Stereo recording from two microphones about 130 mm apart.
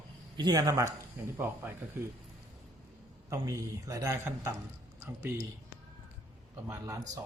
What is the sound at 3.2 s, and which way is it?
A man's voice, 25° right (ahead or behind).